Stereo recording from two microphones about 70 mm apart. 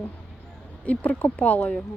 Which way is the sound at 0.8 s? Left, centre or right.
Centre.